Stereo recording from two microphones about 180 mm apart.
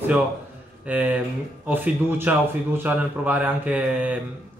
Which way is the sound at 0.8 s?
10° right (ahead or behind).